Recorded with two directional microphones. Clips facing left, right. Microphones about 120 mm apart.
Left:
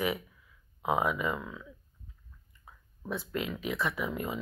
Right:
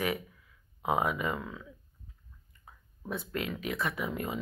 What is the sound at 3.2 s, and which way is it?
Speech, 45° right (ahead or behind).